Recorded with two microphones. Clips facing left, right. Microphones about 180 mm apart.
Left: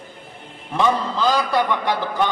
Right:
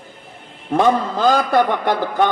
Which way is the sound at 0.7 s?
50° right (ahead or behind).